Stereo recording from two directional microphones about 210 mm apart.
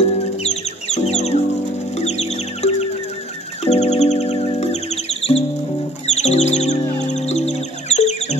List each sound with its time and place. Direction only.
0.2 s music: 30° left (ahead or behind)